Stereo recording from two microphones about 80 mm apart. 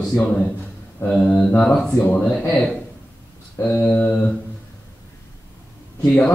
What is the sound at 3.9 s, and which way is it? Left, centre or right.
Speech, centre.